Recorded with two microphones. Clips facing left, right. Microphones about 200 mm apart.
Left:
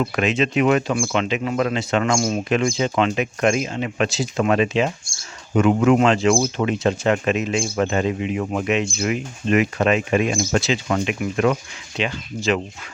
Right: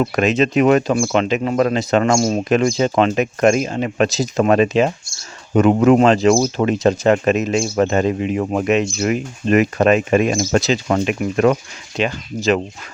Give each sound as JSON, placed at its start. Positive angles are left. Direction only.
{"t": 0.0, "sound": "speech", "side_deg": -40}